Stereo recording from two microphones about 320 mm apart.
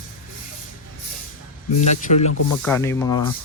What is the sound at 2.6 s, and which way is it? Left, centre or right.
Speech, centre.